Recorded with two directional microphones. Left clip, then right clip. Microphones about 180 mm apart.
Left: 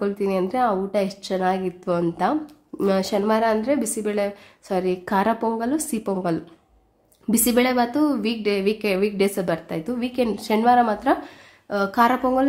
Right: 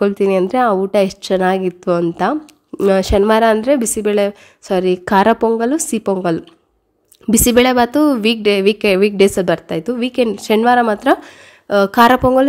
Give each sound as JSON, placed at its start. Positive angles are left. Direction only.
{"t": 0.0, "sound": "a woman's voice", "side_deg": -45}